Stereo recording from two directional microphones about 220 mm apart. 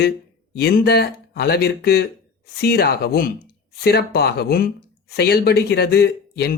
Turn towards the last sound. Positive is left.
turn(degrees=45)  # may be behind; listen again after turning